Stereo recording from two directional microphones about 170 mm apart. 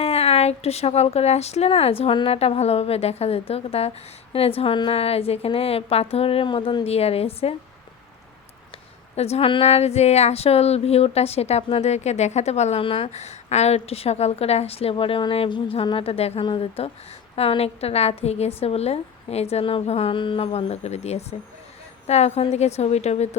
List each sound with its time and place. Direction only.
0.0 s speech: 35° left (ahead or behind)
9.1 s speech: 40° left (ahead or behind)